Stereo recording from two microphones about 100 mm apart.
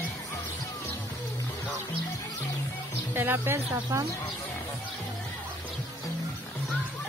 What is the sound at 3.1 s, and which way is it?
Speech, 20° right (ahead or behind).